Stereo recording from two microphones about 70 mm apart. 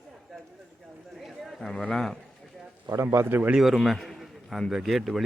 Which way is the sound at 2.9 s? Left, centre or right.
Right.